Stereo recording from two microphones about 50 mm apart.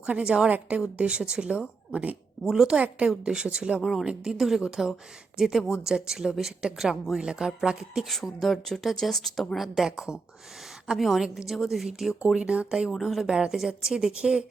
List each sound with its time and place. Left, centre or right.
0.0 s speech: centre
1.9 s speech: right
2.4 s speech: centre
8.0 s speech: centre
12.5 s speech: centre
12.9 s speech: centre